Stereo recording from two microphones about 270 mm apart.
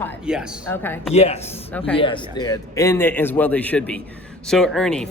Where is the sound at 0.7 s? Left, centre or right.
Centre.